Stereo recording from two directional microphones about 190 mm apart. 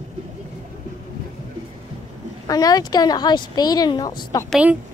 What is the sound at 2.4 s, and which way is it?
Speech, 20° left (ahead or behind).